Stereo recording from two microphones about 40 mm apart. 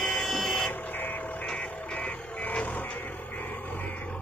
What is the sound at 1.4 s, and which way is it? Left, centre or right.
Music, left.